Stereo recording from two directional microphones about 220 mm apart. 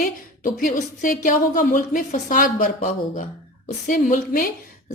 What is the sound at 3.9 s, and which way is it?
Speech, 35° left (ahead or behind).